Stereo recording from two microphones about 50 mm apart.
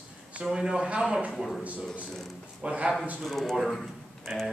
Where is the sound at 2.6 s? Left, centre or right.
Right.